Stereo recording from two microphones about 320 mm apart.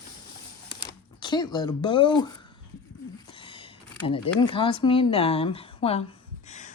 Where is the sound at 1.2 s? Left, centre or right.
Centre.